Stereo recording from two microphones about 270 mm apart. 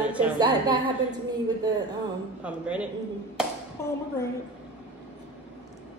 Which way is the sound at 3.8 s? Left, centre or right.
Centre.